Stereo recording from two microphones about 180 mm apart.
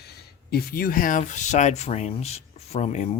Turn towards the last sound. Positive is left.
turn(degrees=35)  # may be behind; listen again after turning